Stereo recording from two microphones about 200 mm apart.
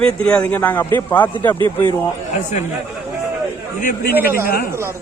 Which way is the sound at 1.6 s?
25° right (ahead or behind).